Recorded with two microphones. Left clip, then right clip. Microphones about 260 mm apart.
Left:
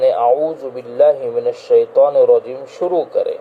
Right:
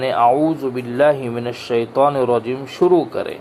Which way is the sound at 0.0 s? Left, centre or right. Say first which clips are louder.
Left 2 dB; right.